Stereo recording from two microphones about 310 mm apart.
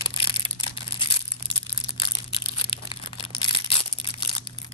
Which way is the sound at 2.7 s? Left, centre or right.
Centre.